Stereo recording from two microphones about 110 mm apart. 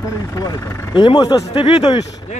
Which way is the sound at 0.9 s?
40° left (ahead or behind).